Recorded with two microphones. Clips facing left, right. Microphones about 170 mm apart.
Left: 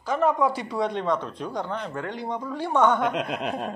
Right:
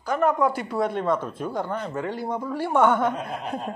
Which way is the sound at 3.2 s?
85° left.